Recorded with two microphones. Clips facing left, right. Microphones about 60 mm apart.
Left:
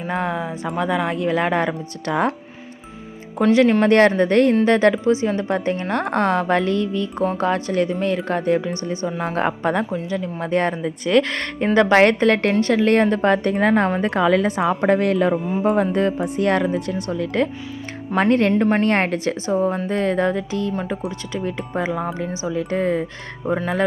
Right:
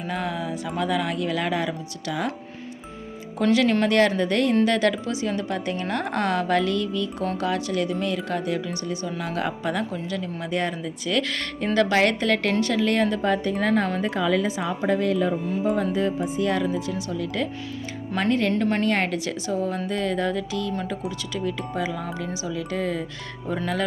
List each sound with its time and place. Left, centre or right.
0.1 s speech: left
3.5 s speech: left
3.8 s speech: left
9.9 s speech: centre
10.4 s speech: left
13.7 s speech: left
18.9 s speech: left